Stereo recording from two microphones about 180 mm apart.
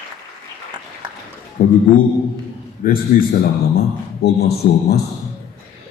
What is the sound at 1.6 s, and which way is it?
Speech, 45° left (ahead or behind).